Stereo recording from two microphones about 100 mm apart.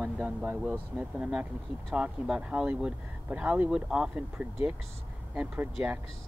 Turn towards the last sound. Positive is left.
turn(degrees=-15)  # may be behind; listen again after turning